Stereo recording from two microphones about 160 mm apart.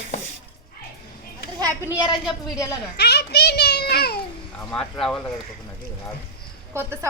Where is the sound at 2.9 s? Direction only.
90° left.